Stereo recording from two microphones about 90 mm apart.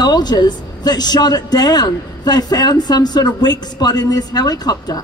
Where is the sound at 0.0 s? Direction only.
50° left (ahead or behind).